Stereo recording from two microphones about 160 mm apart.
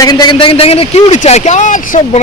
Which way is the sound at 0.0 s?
25° left (ahead or behind).